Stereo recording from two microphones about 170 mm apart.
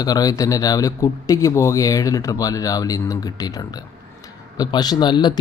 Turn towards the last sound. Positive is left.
turn(degrees=25)  # may be behind; listen again after turning